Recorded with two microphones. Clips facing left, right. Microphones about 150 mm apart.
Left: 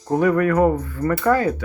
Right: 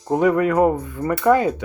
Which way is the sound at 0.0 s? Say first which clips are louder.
Even; 20° right (ahead or behind).